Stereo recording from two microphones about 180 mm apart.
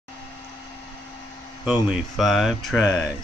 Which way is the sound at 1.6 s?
5° right (ahead or behind).